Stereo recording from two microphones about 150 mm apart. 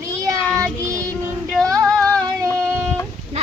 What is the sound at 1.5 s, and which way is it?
Female singing, 5° left (ahead or behind).